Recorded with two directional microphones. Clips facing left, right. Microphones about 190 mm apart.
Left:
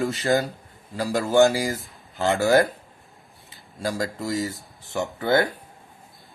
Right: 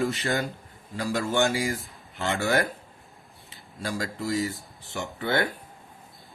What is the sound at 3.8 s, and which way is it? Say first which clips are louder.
Speech: left 4 dB; 40° left (ahead or behind).